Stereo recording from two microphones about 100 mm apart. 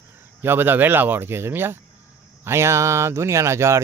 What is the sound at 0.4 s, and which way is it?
Speech, 20° right (ahead or behind).